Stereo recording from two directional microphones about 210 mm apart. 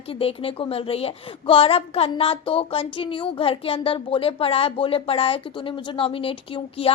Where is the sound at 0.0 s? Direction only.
25° left (ahead or behind).